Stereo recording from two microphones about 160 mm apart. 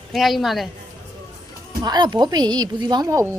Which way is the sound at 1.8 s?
25° right (ahead or behind).